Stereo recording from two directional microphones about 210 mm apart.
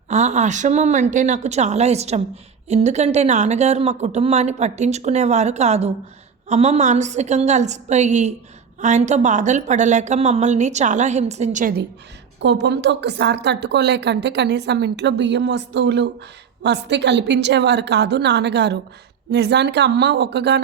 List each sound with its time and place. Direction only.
0.1 s speech: 35° right (ahead or behind)
12.4 s a woman's voice: 55° right (ahead or behind)